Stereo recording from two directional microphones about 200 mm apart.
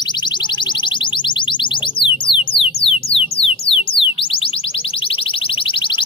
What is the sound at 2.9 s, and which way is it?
Alarm, 30° left (ahead or behind).